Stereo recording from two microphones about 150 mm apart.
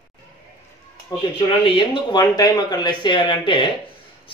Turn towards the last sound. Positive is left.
turn(degrees=35)  # may be behind; listen again after turning